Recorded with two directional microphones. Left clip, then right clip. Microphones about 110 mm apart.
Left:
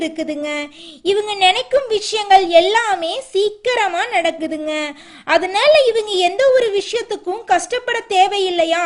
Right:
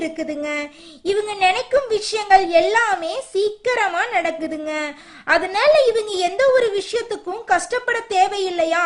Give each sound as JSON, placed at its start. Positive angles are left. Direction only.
{"t": 0.0, "sound": "a woman's voice", "side_deg": 30}